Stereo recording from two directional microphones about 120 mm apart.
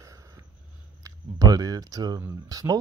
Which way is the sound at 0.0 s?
25° right (ahead or behind).